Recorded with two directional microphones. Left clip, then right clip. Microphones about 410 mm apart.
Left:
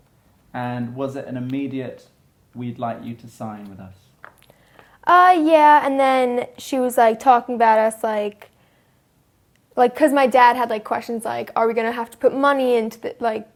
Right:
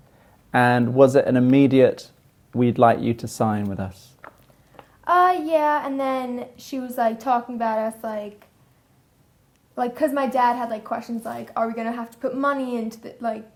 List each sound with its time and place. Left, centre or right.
0.5 s speech: right
5.0 s a woman's voice: left
9.7 s a woman's voice: left